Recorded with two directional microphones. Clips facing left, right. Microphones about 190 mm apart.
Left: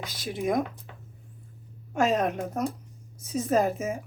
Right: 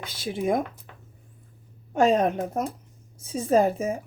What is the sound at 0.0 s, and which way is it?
Speech, 30° right (ahead or behind).